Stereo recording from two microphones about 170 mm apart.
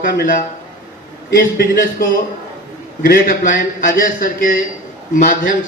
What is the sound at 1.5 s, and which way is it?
A man's voice, 55° left (ahead or behind).